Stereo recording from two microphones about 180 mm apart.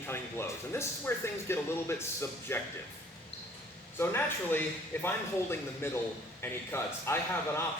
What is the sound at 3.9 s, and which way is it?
Speech, 10° left (ahead or behind).